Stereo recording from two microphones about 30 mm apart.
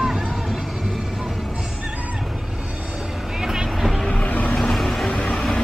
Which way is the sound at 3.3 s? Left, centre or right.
Centre.